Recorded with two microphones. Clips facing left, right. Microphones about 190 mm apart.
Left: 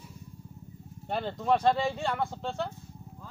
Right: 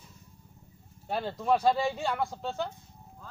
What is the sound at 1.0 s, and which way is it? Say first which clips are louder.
Speech: even; 5° right (ahead or behind).